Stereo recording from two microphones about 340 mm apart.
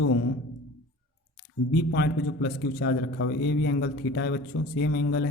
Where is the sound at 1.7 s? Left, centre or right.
Left.